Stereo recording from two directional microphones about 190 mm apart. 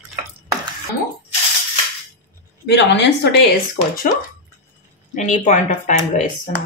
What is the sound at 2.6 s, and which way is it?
Speech, 65° left (ahead or behind).